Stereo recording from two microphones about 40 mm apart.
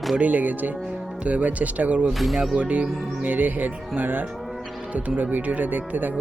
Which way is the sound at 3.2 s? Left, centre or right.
Right.